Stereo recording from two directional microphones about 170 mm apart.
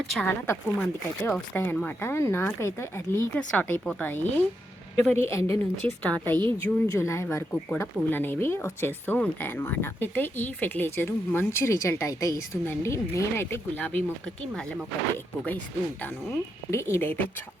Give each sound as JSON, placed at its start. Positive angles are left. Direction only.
{"t": 0.1, "sound": "speech", "side_deg": 10}
{"t": 6.0, "sound": "speech", "side_deg": 5}
{"t": 15.4, "sound": "speech", "side_deg": 10}